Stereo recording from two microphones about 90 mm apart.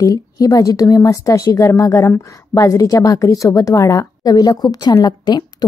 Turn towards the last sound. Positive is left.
turn(degrees=50)  # may be behind; listen again after turning